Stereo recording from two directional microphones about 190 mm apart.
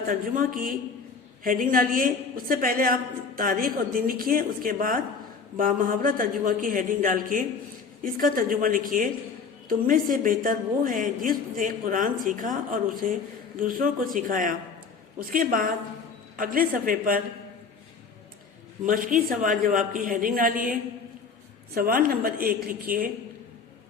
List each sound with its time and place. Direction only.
0.1 s a man's voice: 45° right (ahead or behind)
18.9 s a man's voice: 45° right (ahead or behind)
21.8 s a man's voice: 50° right (ahead or behind)